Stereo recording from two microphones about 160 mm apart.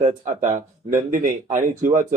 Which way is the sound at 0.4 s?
50° right (ahead or behind).